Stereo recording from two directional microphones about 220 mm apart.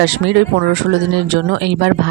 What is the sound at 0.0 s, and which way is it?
Speech, 50° right (ahead or behind).